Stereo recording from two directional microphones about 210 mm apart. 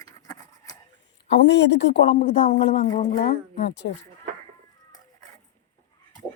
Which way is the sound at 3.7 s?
55° left (ahead or behind).